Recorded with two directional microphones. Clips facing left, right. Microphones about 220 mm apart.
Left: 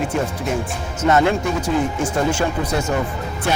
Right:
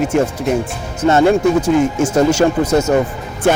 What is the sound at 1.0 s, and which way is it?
Speech, 30° right (ahead or behind).